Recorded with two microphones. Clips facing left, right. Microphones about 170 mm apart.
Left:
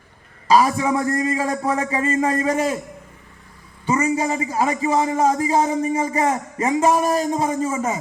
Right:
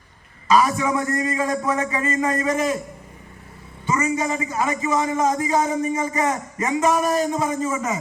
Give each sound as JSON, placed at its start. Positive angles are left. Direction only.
{"t": 0.4, "sound": "a man's voice", "side_deg": 30}
{"t": 3.8, "sound": "a man's voice", "side_deg": 30}